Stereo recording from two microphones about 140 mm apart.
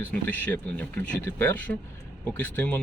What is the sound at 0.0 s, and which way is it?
Speech, 10° left (ahead or behind).